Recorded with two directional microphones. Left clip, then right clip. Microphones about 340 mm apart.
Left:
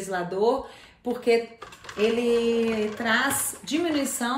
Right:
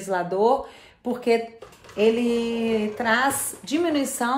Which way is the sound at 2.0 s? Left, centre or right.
Centre.